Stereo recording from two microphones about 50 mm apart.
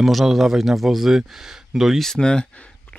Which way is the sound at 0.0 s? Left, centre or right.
Centre.